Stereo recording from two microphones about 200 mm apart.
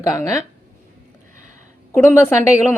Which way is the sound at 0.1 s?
15° left (ahead or behind).